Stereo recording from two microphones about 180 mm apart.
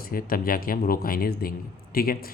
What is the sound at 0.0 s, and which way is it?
Speech, 50° left (ahead or behind).